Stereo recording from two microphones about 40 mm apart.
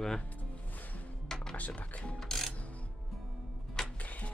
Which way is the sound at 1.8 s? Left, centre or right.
Left.